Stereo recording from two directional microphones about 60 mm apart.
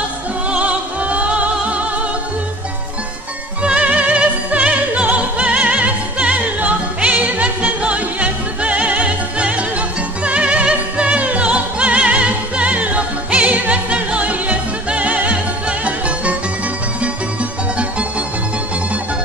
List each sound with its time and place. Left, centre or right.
0.5 s music: right
3.6 s opera: centre
17.0 s music: centre